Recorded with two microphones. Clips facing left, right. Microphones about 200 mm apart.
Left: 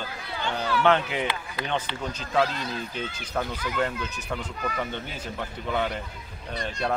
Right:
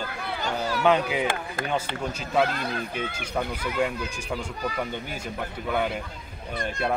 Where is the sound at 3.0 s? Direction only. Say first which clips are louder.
Even; 10° right (ahead or behind).